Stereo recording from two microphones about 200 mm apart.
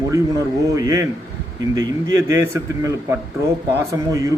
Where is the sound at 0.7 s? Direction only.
15° right (ahead or behind).